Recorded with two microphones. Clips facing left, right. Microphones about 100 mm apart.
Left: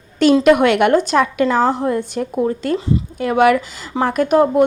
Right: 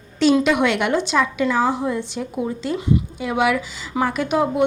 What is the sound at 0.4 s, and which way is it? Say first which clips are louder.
A woman's voice: left 7 dB; 55° left (ahead or behind).